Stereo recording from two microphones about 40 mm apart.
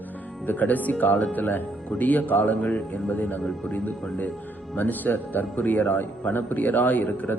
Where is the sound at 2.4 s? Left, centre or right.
Left.